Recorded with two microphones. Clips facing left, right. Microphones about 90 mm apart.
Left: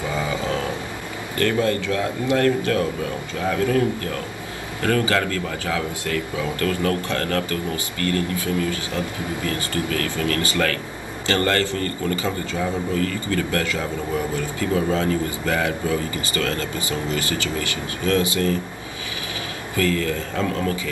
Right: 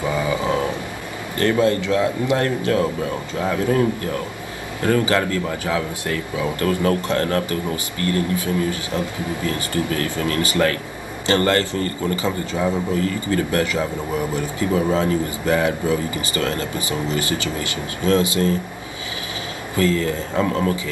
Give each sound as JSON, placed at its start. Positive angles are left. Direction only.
{"t": 0.1, "sound": "vehicle", "side_deg": -20}
{"t": 1.4, "sound": "a man's voice", "side_deg": -25}
{"t": 19.7, "sound": "a man's voice", "side_deg": -25}